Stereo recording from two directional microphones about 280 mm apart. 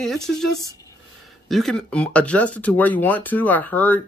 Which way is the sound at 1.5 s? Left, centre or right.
Centre.